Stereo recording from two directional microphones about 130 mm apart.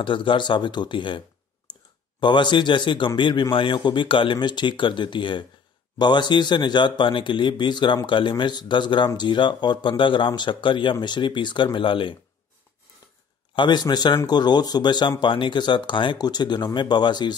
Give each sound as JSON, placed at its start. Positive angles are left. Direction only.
{"t": 0.0, "sound": "speech", "side_deg": 40}
{"t": 13.6, "sound": "speech", "side_deg": 35}